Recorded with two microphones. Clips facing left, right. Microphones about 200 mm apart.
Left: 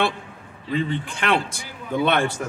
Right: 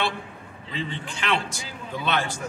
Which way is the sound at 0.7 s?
55° left (ahead or behind).